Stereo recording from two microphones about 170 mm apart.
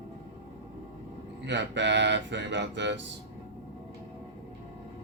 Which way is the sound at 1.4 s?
90° right.